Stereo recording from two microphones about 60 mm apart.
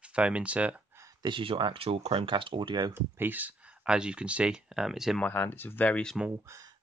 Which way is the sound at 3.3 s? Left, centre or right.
Right.